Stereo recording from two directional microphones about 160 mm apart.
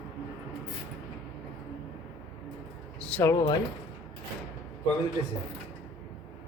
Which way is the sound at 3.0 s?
10° left (ahead or behind).